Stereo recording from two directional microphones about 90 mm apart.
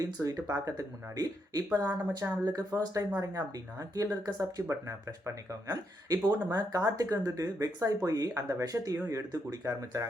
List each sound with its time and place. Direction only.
0.0 s speech: 40° right (ahead or behind)